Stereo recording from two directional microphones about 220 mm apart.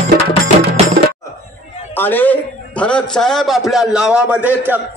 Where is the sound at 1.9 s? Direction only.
10° left (ahead or behind).